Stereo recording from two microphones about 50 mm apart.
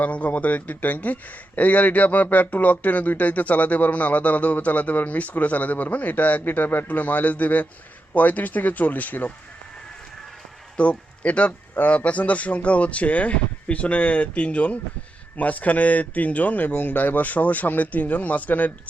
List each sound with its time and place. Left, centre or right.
0.0 s speech: left
10.8 s speech: left